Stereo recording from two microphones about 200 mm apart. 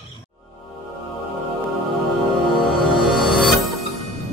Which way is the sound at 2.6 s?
Centre (ahead or behind).